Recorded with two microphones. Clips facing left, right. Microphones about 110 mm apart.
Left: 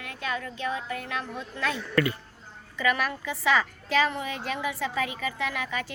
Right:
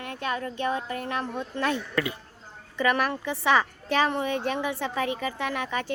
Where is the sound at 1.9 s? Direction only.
20° right (ahead or behind).